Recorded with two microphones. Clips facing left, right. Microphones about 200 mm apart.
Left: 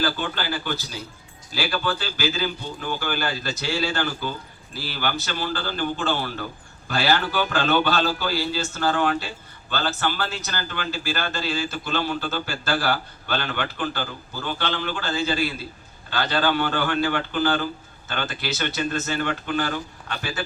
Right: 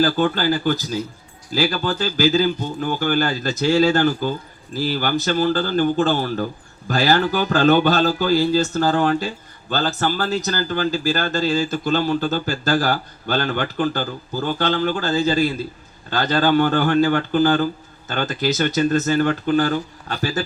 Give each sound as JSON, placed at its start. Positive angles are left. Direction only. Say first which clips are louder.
{"t": 0.0, "sound": "speech", "louder": "right 8 dB", "side_deg": -45}